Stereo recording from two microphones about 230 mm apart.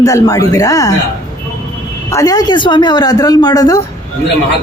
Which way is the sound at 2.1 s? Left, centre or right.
Centre.